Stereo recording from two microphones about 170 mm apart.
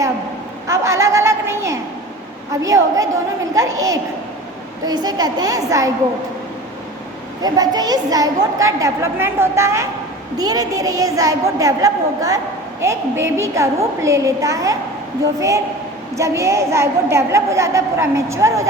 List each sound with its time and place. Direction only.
0.7 s a sound: 15° right (ahead or behind)
2.5 s a woman's voice: 20° right (ahead or behind)
7.4 s a woman's voice: 20° right (ahead or behind)